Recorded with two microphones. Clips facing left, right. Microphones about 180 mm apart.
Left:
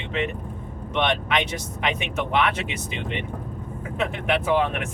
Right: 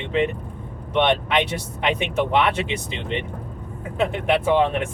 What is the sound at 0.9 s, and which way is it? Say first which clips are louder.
Speech: right 4 dB; 35° right (ahead or behind).